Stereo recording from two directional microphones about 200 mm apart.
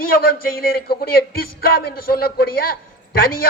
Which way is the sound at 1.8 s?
50° left (ahead or behind).